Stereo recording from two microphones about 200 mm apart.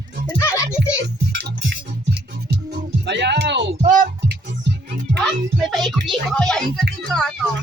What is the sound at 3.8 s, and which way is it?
Music, 40° right (ahead or behind).